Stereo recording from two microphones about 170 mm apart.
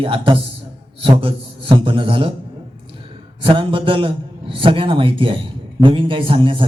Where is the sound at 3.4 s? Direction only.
30° right (ahead or behind).